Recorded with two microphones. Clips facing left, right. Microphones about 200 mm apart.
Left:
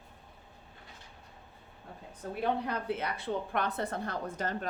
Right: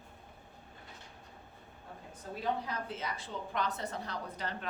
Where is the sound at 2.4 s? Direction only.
60° left (ahead or behind).